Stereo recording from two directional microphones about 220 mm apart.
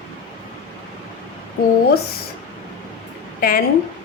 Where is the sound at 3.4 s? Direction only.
40° left (ahead or behind).